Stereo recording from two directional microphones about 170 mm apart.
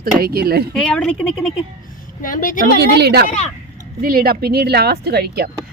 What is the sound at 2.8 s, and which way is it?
Speech, 75° right (ahead or behind).